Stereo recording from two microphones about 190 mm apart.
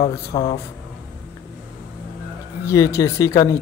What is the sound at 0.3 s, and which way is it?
Speech, 20° left (ahead or behind).